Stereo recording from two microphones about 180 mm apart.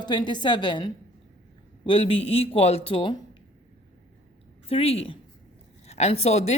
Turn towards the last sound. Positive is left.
turn(degrees=35)  # may be behind; listen again after turning